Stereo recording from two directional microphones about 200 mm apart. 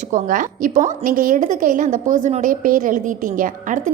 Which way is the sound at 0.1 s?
40° right (ahead or behind).